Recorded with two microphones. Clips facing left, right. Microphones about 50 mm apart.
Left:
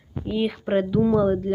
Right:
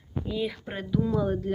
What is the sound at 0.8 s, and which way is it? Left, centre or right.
Speech, left.